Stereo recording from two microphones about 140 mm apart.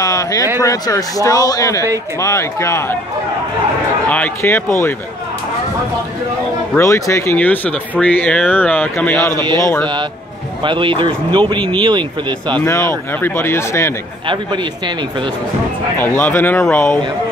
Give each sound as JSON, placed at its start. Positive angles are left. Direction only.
{"t": 0.0, "sound": "a man's voice", "side_deg": 25}
{"t": 4.1, "sound": "speech", "side_deg": 15}
{"t": 6.8, "sound": "a man's voice", "side_deg": 20}
{"t": 10.6, "sound": "speech", "side_deg": -35}
{"t": 13.2, "sound": "speech", "side_deg": 15}
{"t": 14.2, "sound": "speech", "side_deg": -35}
{"t": 16.2, "sound": "speech", "side_deg": 15}